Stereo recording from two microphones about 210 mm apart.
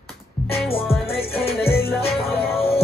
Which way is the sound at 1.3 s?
25° left (ahead or behind).